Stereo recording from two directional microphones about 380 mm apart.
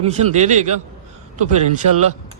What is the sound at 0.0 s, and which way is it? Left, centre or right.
Speech, centre.